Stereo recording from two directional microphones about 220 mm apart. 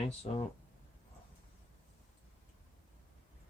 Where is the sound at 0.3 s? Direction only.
30° left (ahead or behind).